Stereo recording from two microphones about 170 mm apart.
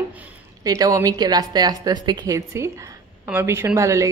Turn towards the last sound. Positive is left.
turn(degrees=-20)  # may be behind; listen again after turning